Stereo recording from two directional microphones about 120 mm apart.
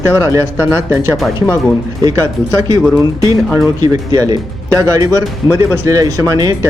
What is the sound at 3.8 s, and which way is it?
Speech, 30° right (ahead or behind).